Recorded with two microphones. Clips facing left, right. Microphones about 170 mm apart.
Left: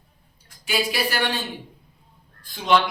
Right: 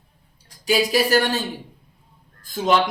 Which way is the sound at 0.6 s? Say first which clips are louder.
Right 6 dB; 40° right (ahead or behind).